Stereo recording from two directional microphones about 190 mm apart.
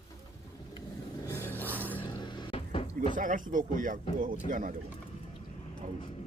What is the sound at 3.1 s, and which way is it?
Speech, 45° right (ahead or behind).